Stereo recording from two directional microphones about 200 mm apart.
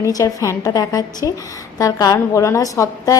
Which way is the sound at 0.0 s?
15° left (ahead or behind).